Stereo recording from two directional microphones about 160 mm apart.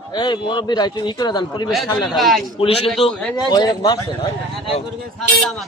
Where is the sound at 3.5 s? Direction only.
25° left (ahead or behind).